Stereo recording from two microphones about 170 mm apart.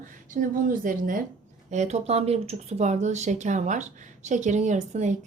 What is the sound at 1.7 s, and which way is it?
Speech, 40° right (ahead or behind).